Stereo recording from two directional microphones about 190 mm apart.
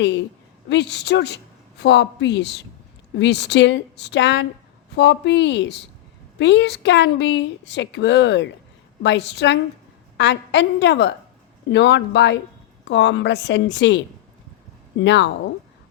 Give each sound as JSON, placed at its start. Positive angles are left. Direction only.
{"t": 0.0, "sound": "a woman's voice", "side_deg": 65}